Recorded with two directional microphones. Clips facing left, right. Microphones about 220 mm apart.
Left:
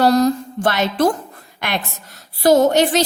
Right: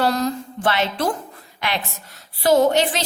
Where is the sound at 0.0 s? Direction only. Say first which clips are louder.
Left 7 dB; 40° left (ahead or behind).